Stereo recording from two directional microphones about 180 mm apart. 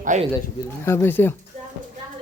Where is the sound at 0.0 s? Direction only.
45° right (ahead or behind).